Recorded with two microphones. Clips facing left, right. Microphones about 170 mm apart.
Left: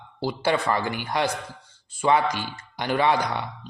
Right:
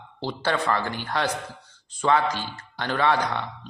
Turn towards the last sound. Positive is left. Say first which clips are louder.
# even
turn(degrees=10)  # may be behind; listen again after turning